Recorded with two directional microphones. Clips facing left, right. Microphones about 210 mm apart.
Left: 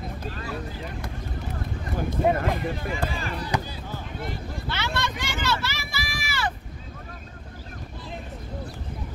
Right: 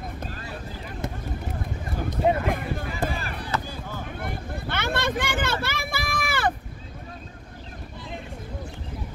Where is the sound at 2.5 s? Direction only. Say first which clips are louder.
Even; 50° right (ahead or behind).